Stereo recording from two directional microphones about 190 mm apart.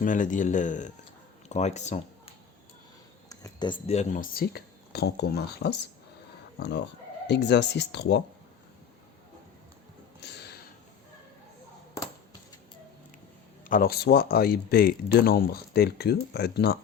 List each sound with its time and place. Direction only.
0.0 s speech: 40° left (ahead or behind)
3.2 s speech: 20° left (ahead or behind); by 8.2 s 60° left (ahead or behind)
10.2 s a sound: 60° left (ahead or behind)
13.7 s speech: 50° left (ahead or behind)